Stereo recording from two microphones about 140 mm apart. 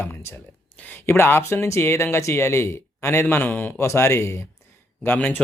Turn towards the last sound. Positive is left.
turn(degrees=10)  # may be behind; listen again after turning